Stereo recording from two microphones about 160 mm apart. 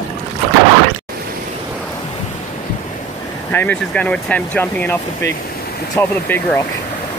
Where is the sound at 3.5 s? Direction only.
10° left (ahead or behind).